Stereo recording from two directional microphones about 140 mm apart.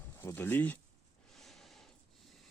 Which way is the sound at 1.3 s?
Centre (ahead or behind).